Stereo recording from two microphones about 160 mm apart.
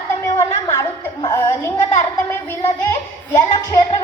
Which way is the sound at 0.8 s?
20° left (ahead or behind).